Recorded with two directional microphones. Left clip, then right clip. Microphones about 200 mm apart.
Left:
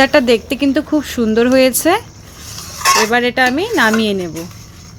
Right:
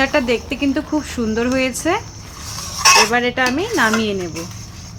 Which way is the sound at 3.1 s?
45° left (ahead or behind).